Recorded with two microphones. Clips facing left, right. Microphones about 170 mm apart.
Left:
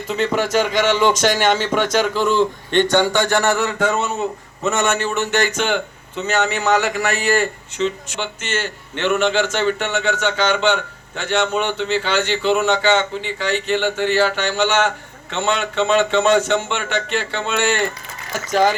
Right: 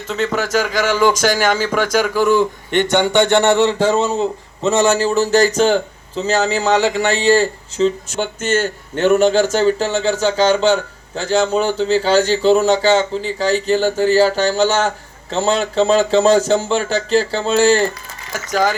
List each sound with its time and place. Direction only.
0.1 s a man's voice: 5° right (ahead or behind); by 17.9 s 35° right (ahead or behind)